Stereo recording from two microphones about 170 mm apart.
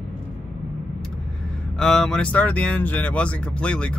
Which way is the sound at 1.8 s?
Centre (ahead or behind).